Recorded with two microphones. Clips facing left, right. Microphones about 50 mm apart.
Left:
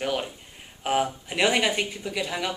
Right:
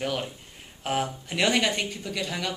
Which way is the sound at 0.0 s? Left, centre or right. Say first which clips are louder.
Left 2 dB; centre.